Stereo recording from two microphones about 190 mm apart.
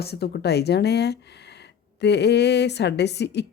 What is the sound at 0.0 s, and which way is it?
A woman's voice, 60° left (ahead or behind).